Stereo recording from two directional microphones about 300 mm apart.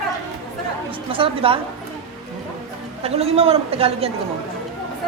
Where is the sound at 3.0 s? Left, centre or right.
Centre.